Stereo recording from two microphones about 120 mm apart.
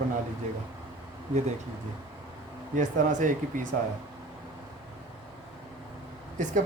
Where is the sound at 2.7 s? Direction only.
90° right.